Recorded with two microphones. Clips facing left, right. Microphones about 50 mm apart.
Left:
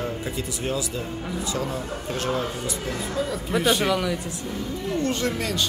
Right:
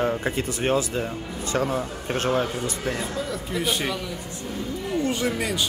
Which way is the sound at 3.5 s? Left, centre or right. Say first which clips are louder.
Left 5 dB; left.